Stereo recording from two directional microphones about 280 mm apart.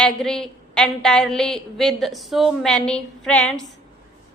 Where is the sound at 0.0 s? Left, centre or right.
Centre.